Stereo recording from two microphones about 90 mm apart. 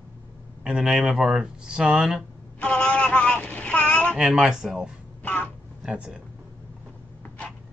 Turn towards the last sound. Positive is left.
turn(degrees=-10)  # may be behind; listen again after turning